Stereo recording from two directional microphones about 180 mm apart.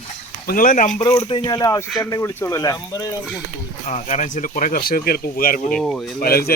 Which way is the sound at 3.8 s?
40° left (ahead or behind).